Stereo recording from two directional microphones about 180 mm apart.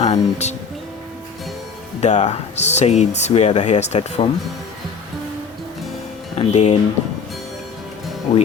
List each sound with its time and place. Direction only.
0.0 s speech: 40° left (ahead or behind)
2.0 s speech: 40° left (ahead or behind)
6.3 s speech: 35° left (ahead or behind)
8.3 s speech: 30° left (ahead or behind)